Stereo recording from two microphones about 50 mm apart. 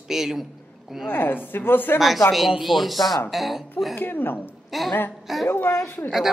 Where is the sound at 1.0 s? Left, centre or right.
Left.